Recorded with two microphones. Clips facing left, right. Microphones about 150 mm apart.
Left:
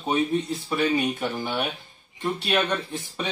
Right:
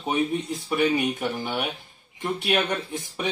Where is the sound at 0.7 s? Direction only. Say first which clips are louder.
Right 1 dB; 15° right (ahead or behind).